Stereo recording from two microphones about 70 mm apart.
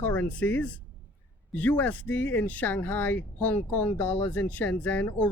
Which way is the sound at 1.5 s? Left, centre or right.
Left.